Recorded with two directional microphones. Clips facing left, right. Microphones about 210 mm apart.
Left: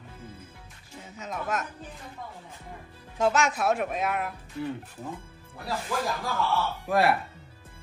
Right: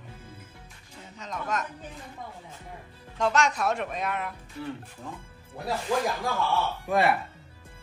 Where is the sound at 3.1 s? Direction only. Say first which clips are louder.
Left 1 dB; 5° left (ahead or behind).